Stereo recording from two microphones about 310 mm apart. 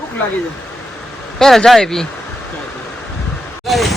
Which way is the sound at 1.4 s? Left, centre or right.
Centre.